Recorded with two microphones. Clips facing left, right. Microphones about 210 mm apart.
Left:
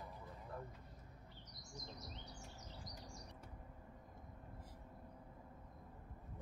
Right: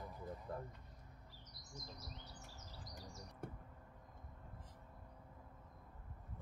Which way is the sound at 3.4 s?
55° right (ahead or behind).